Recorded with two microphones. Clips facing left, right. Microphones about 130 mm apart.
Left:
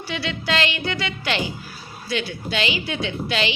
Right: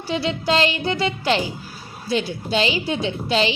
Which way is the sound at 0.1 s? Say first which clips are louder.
Right 5 dB; 35° right (ahead or behind).